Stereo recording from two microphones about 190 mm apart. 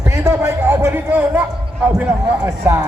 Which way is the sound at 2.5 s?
15° right (ahead or behind).